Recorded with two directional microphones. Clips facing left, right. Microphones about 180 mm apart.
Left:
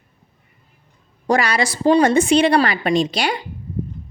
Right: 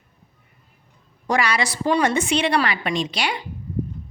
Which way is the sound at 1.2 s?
35° left (ahead or behind).